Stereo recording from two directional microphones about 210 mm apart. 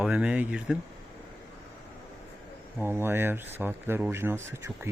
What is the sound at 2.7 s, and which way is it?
Speech, 10° right (ahead or behind).